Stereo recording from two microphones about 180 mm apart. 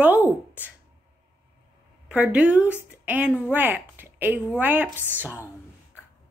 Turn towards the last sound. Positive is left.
turn(degrees=-10)  # may be behind; listen again after turning